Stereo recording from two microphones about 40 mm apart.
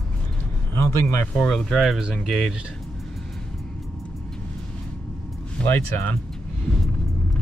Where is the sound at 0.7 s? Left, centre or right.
Left.